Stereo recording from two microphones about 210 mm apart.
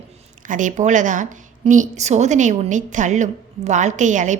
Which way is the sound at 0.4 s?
35° right (ahead or behind).